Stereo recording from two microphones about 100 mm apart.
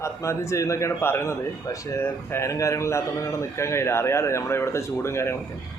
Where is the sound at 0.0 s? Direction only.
30° left (ahead or behind).